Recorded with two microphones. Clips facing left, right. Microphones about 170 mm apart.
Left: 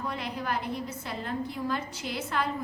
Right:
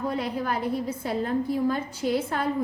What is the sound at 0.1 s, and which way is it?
A woman's voice, 45° right (ahead or behind).